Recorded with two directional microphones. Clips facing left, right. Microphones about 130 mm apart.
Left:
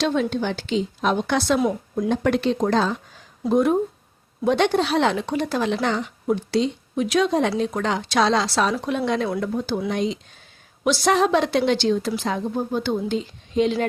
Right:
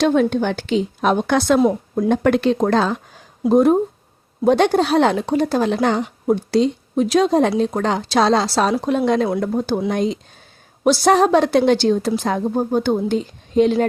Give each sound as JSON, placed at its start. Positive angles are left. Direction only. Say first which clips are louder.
{"t": 0.0, "sound": "a woman's voice", "louder": "right 6 dB", "side_deg": -50}
{"t": 3.5, "sound": "a woman's voice", "louder": "right 5 dB", "side_deg": -35}